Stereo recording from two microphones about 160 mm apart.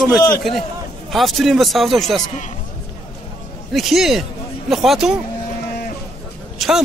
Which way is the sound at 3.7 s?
Centre (ahead or behind).